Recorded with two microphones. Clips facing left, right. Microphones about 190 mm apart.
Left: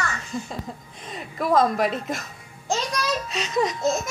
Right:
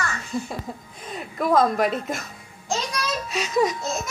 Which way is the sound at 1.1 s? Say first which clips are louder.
Right 1 dB; centre (ahead or behind).